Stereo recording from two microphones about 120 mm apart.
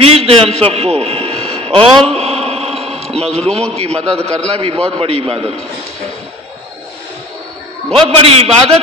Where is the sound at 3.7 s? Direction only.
60° right (ahead or behind).